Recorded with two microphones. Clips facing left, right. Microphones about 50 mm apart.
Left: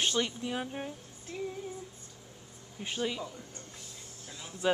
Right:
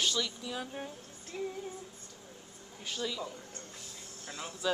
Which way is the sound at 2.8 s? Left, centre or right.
Left.